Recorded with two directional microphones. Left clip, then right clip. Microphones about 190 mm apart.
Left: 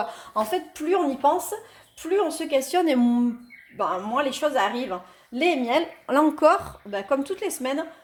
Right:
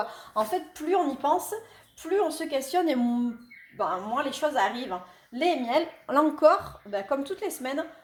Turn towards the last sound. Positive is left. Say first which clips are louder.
# left 4 dB
turn(degrees=30)  # may be behind; listen again after turning